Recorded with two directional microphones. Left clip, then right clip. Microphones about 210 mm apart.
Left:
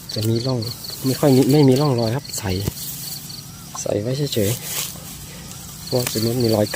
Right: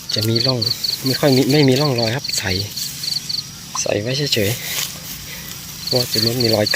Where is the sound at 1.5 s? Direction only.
20° left (ahead or behind).